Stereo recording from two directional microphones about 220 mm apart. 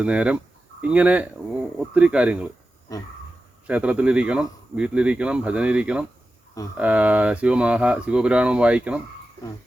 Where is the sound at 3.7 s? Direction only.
5° right (ahead or behind).